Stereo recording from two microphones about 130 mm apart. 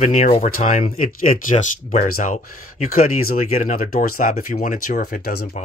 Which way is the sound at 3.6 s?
85° left.